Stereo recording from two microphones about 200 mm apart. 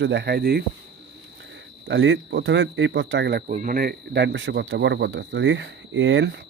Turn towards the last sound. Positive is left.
turn(degrees=-65)  # may be behind; listen again after turning